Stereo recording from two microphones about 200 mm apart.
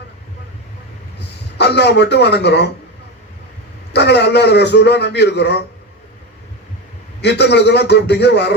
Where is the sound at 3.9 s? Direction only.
60° left (ahead or behind).